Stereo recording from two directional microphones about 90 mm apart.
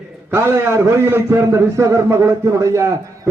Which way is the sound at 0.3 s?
30° right (ahead or behind).